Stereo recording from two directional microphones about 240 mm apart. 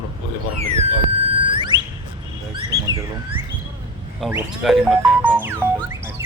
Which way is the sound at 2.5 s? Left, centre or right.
Centre.